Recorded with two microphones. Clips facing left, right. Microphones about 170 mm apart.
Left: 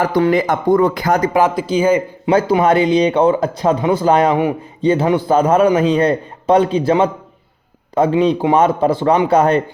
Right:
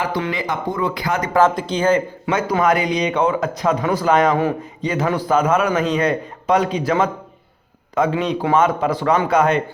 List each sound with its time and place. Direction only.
0.0 s speech: 45° left (ahead or behind)
1.3 s speech: 15° left (ahead or behind)
2.3 s a man's voice: 30° left (ahead or behind)
8.2 s a man's voice: 30° left (ahead or behind)